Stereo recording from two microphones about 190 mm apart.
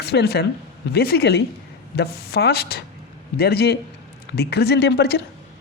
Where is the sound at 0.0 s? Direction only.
60° left (ahead or behind).